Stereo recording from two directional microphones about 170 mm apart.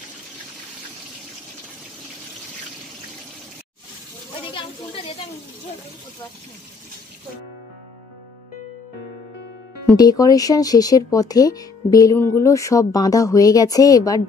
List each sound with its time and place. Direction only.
9.8 s speech: 20° left (ahead or behind)